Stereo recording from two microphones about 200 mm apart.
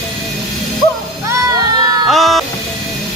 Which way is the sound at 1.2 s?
15° right (ahead or behind).